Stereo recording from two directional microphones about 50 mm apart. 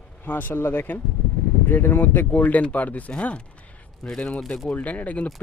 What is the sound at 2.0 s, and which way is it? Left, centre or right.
Speech, left.